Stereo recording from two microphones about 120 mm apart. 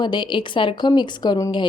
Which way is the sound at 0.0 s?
40° left (ahead or behind).